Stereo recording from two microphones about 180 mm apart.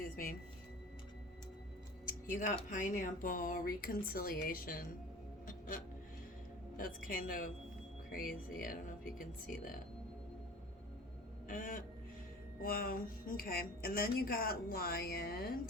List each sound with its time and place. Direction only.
0.0 s music: 50° left (ahead or behind)
2.0 s speech: 45° left (ahead or behind)
5.5 s music: 50° left (ahead or behind)
6.7 s speech: 50° left (ahead or behind)
11.4 s speech: 50° left (ahead or behind)